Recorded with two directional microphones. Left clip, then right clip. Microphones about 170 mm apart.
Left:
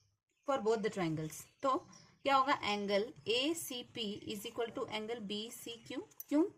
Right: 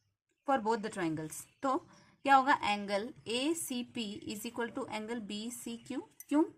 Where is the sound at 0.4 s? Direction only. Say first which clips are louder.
Right 2 dB; 40° right (ahead or behind).